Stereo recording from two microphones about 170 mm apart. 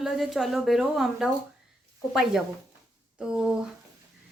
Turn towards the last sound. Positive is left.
turn(degrees=-5)  # may be behind; listen again after turning